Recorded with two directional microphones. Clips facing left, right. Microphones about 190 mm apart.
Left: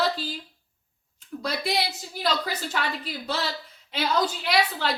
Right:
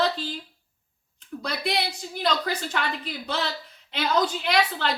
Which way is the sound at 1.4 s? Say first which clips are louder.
Left 1 dB; 5° left (ahead or behind).